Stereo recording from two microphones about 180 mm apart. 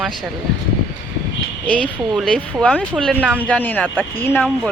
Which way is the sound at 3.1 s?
10° right (ahead or behind).